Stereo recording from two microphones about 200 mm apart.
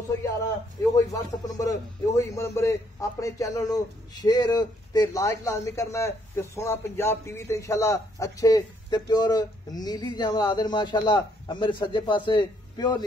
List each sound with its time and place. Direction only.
0.9 s speech: 15° left (ahead or behind)